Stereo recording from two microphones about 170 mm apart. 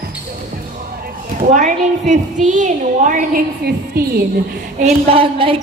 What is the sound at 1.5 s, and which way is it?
Speech, 50° right (ahead or behind).